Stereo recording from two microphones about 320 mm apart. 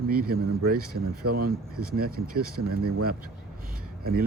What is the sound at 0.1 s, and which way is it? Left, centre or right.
Speech, right.